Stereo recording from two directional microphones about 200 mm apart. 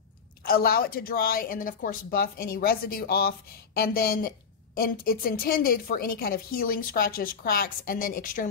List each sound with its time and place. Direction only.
0.5 s speech: 50° left (ahead or behind)